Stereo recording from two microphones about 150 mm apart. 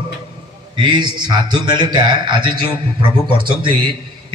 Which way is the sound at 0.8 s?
30° right (ahead or behind).